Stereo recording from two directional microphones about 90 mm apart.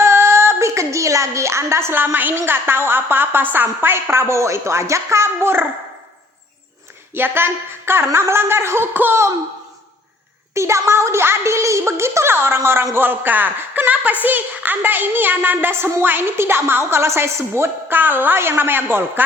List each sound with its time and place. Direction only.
0.0 s a sound: 30° right (ahead or behind)
2.4 s speech: 25° right (ahead or behind)
7.1 s speech: 25° right (ahead or behind)
10.5 s speech: 30° right (ahead or behind)